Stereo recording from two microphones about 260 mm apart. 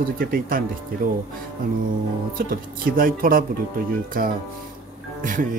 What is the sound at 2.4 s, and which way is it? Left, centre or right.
Speech, right.